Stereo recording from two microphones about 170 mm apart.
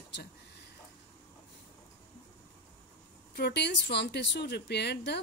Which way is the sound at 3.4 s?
80° left.